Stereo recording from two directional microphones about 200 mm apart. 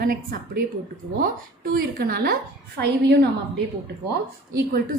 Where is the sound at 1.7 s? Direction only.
50° right (ahead or behind).